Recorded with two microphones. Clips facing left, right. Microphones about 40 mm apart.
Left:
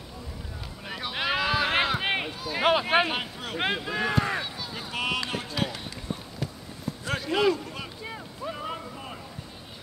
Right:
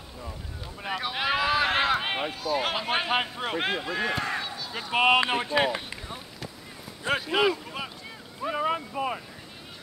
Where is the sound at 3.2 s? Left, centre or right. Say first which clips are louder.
Right 5 dB; right.